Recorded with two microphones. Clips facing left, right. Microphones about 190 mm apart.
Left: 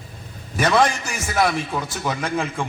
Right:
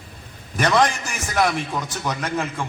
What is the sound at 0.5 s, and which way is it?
A man's voice, 10° left (ahead or behind).